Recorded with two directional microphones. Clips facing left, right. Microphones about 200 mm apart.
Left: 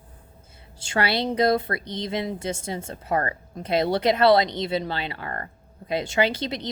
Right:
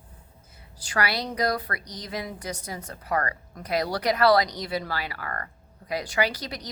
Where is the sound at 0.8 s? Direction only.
25° left (ahead or behind).